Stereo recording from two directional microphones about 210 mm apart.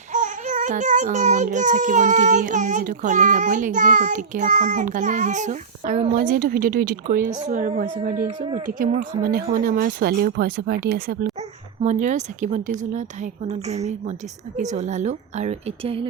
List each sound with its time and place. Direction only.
0.1 s speech: 35° right (ahead or behind)
8.4 s speech: 25° right (ahead or behind)
8.8 s speech: 40° right (ahead or behind)
11.8 s speech: 35° right (ahead or behind)